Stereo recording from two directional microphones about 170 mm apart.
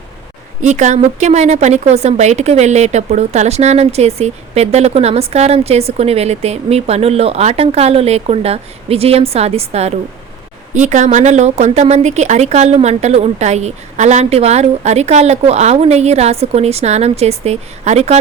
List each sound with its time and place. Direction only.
0.6 s a woman's voice: 45° right (ahead or behind)